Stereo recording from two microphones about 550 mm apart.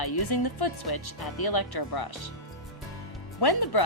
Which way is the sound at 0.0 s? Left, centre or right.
Left.